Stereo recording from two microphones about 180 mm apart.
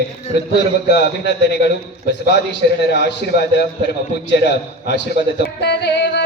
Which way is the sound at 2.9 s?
65° left (ahead or behind).